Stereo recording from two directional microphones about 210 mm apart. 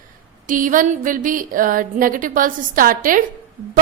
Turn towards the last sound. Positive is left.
turn(degrees=-40)  # may be behind; listen again after turning